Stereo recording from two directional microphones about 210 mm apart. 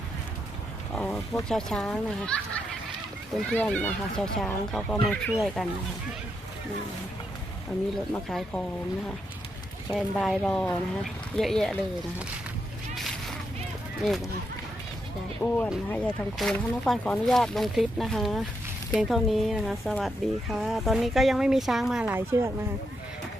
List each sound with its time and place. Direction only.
0.9 s wild animals: 5° left (ahead or behind)
1.5 s speech: 5° left (ahead or behind)
8.1 s speech: 5° left (ahead or behind)
9.9 s speech: centre (ahead or behind)
13.0 s a sound: centre (ahead or behind)
14.0 s speech: 5° left (ahead or behind)
15.4 s speech: 10° left (ahead or behind); by 22.5 s 10° right (ahead or behind)